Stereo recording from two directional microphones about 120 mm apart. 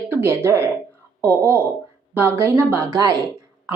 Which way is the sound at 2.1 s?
20° right (ahead or behind).